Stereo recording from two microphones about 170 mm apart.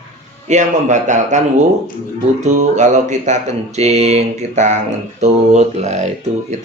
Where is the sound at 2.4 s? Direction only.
45° right (ahead or behind).